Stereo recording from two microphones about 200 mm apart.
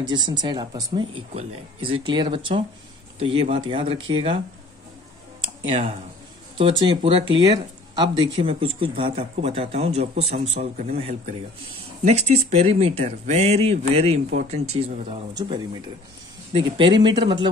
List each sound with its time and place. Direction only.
0.0 s speech: 20° right (ahead or behind)
5.4 s tick-tock: 30° right (ahead or behind)
6.6 s speech: 25° right (ahead or behind)